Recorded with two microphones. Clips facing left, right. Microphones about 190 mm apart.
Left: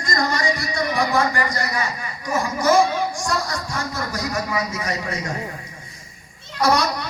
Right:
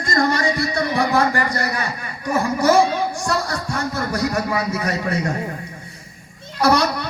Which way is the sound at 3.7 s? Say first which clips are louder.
Right 4 dB; 60° right (ahead or behind).